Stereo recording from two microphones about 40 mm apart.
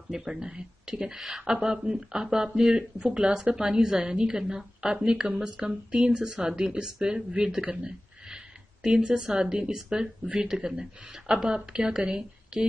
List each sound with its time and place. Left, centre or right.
0.1 s a woman's voice: centre
8.8 s a woman's voice: right
9.8 s a woman's voice: centre